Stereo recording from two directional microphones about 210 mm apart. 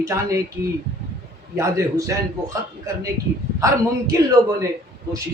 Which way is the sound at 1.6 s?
15° right (ahead or behind).